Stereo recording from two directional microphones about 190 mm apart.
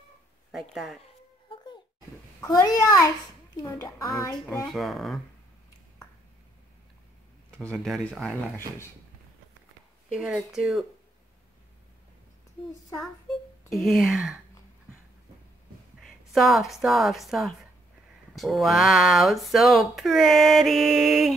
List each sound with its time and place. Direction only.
0.5 s speech: centre (ahead or behind)
2.4 s speech: 15° left (ahead or behind)
4.6 s speech: centre (ahead or behind)
7.6 s speech: centre (ahead or behind)
10.1 s speech: 5° right (ahead or behind)
13.7 s speech: centre (ahead or behind)
16.0 s a woman's voice: centre (ahead or behind)